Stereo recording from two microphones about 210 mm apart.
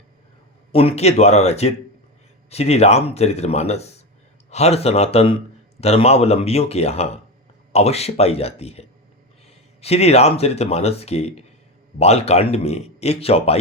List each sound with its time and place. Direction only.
0.7 s speech: 25° left (ahead or behind)